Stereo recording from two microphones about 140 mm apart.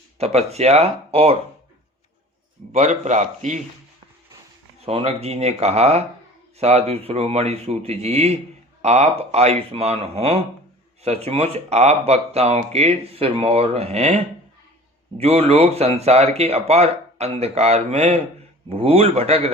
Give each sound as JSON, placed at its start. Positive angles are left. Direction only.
{"t": 0.2, "sound": "speech", "side_deg": -50}
{"t": 2.7, "sound": "a man's voice", "side_deg": -55}
{"t": 4.9, "sound": "speech", "side_deg": -45}
{"t": 15.2, "sound": "speech", "side_deg": -45}